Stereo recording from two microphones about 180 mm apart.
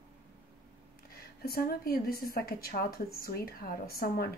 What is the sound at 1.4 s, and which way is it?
Speech, 55° left (ahead or behind).